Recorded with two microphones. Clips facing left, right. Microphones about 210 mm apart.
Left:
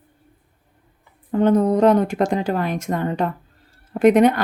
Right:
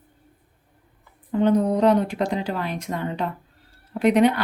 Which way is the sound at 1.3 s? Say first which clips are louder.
Left 3 dB; 50° left (ahead or behind).